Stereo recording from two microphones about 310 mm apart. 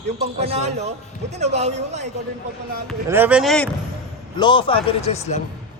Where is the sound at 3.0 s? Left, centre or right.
Centre.